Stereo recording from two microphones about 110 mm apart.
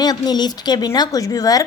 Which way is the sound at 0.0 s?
40° left (ahead or behind).